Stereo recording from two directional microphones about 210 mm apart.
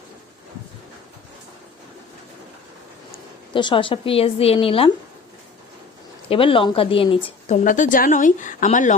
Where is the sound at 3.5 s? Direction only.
25° left (ahead or behind).